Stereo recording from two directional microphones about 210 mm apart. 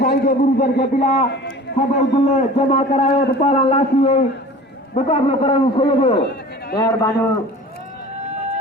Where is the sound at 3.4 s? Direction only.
30° left (ahead or behind).